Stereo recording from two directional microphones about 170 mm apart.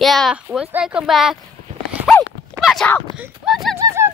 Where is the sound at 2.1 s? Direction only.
Centre (ahead or behind).